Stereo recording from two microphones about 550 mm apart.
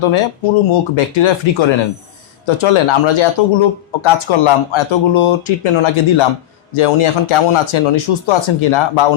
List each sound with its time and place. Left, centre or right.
0.0 s speech: left